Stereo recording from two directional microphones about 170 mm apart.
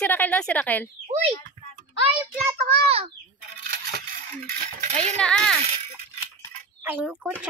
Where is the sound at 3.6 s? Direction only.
65° right (ahead or behind).